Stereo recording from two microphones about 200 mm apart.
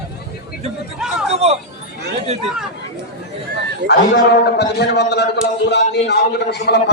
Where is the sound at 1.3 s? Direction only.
30° right (ahead or behind).